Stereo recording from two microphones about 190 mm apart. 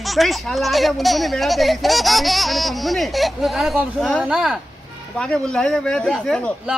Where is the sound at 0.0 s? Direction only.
Centre (ahead or behind).